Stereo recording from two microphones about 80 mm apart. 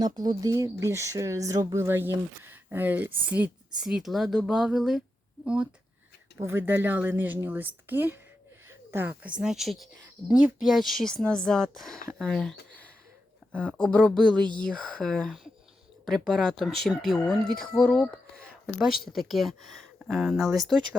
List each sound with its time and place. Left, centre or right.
0.0 s speech: right
0.9 s speech: right; by 3.5 s centre
3.8 s speech: centre
6.4 s speech: right
9.4 s speech: centre
10.2 s speech: centre
14.3 s speech: right
14.6 s speech: centre
18.6 s speech: centre